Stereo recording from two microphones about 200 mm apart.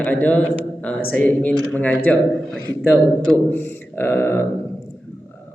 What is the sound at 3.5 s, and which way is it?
Speech, 10° left (ahead or behind).